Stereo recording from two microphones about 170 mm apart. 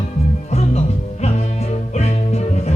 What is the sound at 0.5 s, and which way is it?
Music, 40° left (ahead or behind).